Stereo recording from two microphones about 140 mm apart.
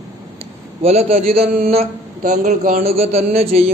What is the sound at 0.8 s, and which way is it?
A man's voice, 45° right (ahead or behind).